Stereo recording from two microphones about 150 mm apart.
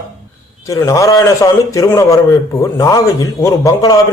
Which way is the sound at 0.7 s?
20° left (ahead or behind).